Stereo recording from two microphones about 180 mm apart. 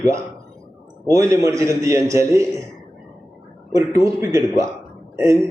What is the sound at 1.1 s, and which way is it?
A man's voice, 15° right (ahead or behind).